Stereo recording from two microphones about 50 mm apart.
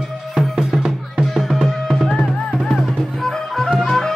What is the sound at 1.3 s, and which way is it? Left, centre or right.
Music, centre.